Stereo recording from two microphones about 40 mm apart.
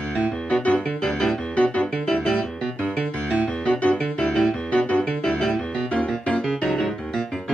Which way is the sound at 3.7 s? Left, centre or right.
Left.